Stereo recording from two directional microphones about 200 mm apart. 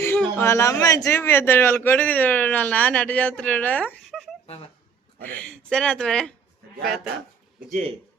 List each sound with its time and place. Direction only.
0.0 s a man's voice: 10° left (ahead or behind)
7.7 s speech: 35° right (ahead or behind)